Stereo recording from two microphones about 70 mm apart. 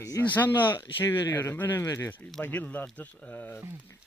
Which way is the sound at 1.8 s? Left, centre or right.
Left.